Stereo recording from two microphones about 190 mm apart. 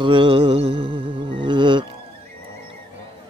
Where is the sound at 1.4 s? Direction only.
25° right (ahead or behind).